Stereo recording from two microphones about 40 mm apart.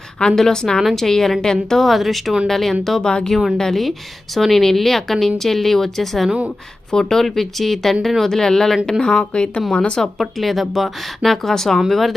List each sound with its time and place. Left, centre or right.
0.3 s speech: centre
0.8 s speech: centre
1.7 s a woman's voice: centre
3.0 s a woman's voice: left
3.6 s a woman's voice: centre; by 10.0 s left
10.2 s a woman's voice: centre